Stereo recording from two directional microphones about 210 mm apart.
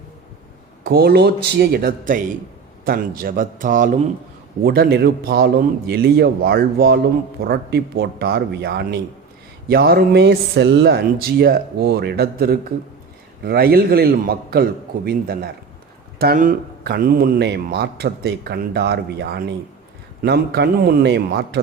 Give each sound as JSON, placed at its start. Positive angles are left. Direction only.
{"t": 0.9, "sound": "a man's voice", "side_deg": -45}
{"t": 4.6, "sound": "speech", "side_deg": -45}